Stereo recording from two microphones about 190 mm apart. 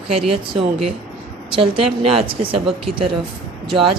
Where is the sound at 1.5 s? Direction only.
30° right (ahead or behind).